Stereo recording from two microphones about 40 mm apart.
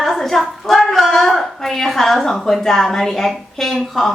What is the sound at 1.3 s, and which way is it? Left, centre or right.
A woman's voice, centre.